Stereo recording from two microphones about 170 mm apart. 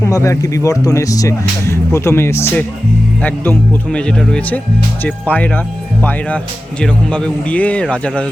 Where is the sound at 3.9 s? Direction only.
5° left (ahead or behind).